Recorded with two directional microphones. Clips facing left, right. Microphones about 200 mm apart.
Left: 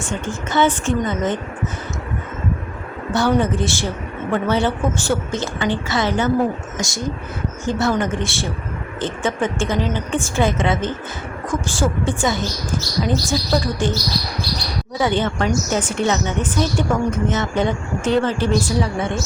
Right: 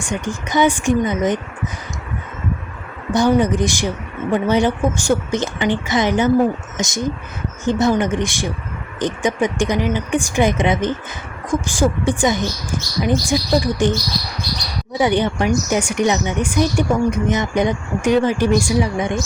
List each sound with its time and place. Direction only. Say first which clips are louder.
0.0 s speech: right 1 dB; 15° right (ahead or behind)
3.1 s speech: right 3 dB; 15° right (ahead or behind)
14.9 s speech: right 3 dB; 15° right (ahead or behind)